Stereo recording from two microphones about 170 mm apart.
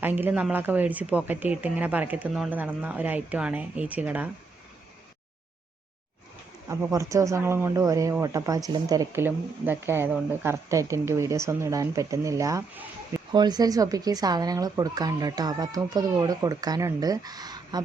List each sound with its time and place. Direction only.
0.0 s speech: 10° right (ahead or behind)
6.7 s speech: 20° right (ahead or behind)